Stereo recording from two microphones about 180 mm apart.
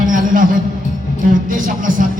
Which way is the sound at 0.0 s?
45° right (ahead or behind).